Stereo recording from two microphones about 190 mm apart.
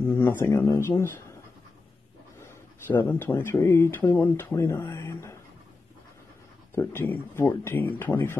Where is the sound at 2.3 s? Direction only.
15° left (ahead or behind).